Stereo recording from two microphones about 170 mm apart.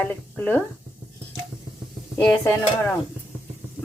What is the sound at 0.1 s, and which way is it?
Speech, 10° left (ahead or behind).